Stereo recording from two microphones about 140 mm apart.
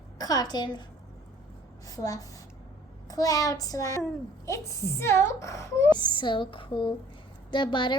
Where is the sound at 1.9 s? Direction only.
25° left (ahead or behind).